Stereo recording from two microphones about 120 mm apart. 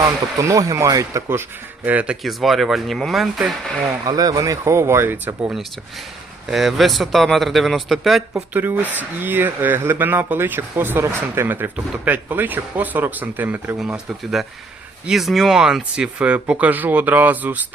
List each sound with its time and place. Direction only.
0.0 s speech: 25° right (ahead or behind)
2.2 s speech: centre (ahead or behind)
4.0 s speech: 30° right (ahead or behind); by 5.5 s 15° right (ahead or behind)
6.5 s speech: centre (ahead or behind)
8.3 s speech: 15° right (ahead or behind)